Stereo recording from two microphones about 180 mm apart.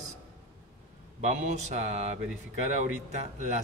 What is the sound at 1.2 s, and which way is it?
Speech, 40° right (ahead or behind).